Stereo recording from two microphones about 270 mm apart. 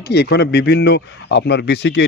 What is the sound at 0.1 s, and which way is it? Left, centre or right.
A man's voice, left.